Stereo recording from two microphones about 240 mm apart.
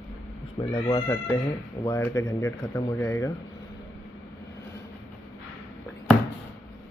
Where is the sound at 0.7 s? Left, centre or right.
Centre.